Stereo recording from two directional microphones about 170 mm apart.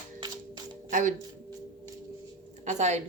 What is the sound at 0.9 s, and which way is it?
Speech, 45° right (ahead or behind).